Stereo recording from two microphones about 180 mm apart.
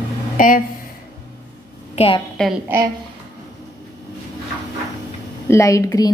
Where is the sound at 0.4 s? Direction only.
50° left (ahead or behind).